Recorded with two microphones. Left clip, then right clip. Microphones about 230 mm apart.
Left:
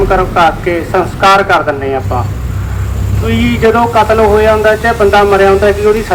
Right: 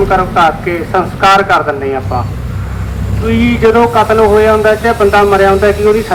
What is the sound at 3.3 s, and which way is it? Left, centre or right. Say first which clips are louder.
Speech: right 1 dB; left.